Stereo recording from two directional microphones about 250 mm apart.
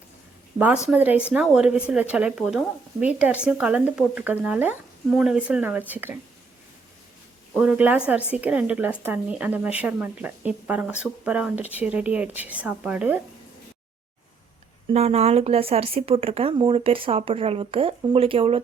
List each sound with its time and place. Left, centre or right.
0.9 s a woman's voice: centre
7.5 s a woman's voice: centre
14.8 s speech: right